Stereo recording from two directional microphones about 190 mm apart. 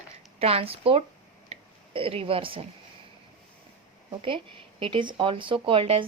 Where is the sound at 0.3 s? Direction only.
30° right (ahead or behind).